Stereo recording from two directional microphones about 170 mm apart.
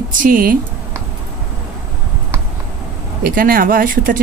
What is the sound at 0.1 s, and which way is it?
Speech, 55° right (ahead or behind).